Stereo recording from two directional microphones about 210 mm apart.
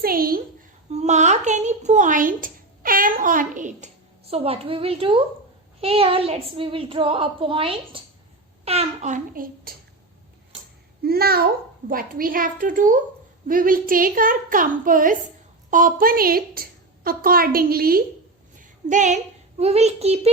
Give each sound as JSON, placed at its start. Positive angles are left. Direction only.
{"t": 0.0, "sound": "a woman's voice", "side_deg": -45}
{"t": 0.9, "sound": "a woman's voice", "side_deg": -35}
{"t": 11.0, "sound": "a woman's voice", "side_deg": -45}